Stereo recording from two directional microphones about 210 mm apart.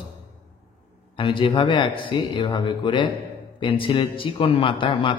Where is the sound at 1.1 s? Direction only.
25° left (ahead or behind).